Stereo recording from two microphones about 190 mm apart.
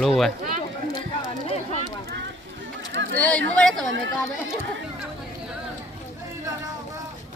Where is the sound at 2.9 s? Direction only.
75° right (ahead or behind).